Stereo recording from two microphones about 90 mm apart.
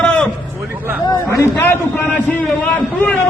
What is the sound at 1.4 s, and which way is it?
Speech, 25° left (ahead or behind).